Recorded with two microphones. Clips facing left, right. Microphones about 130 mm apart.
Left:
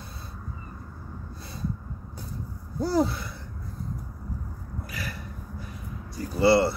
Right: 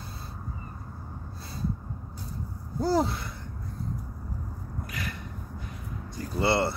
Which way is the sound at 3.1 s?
Centre (ahead or behind).